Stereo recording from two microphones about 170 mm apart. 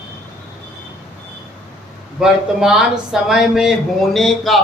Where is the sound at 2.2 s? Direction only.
Centre (ahead or behind).